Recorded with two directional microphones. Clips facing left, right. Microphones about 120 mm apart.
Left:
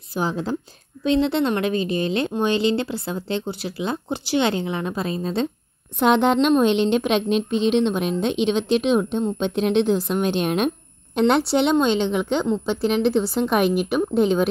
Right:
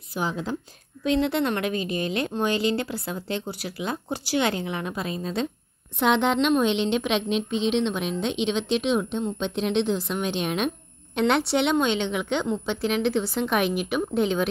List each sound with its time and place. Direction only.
0.1 s a woman's voice: 35° left (ahead or behind)
11.1 s a woman's voice: 35° left (ahead or behind)